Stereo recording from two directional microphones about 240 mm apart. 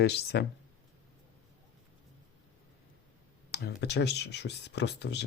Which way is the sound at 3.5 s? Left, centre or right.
Left.